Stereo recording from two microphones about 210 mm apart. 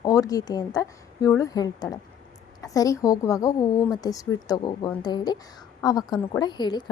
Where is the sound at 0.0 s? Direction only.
15° left (ahead or behind).